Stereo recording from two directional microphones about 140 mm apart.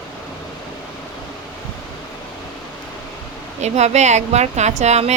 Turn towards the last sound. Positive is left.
turn(degrees=-55)  # may be behind; listen again after turning